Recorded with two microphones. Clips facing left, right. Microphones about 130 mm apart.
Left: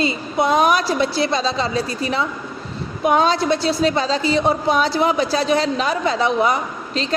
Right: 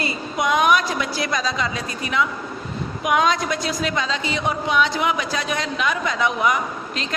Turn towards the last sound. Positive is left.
turn(degrees=30)  # may be behind; listen again after turning